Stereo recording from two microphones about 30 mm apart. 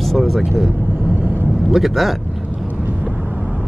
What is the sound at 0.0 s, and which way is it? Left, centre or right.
Vehicle, centre.